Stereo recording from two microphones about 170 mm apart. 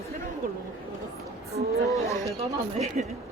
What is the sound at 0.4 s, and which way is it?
Speech, 55° right (ahead or behind).